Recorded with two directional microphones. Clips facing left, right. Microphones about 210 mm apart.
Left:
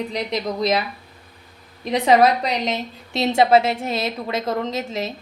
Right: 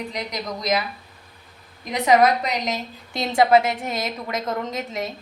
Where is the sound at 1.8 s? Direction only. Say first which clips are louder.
Left 2 dB; 30° left (ahead or behind).